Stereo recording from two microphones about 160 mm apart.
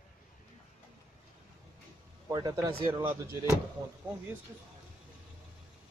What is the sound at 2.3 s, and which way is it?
Speech, 20° right (ahead or behind).